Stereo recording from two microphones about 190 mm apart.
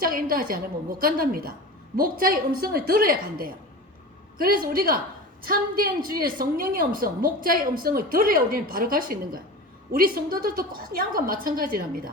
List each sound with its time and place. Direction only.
0.0 s a woman's voice: 50° right (ahead or behind)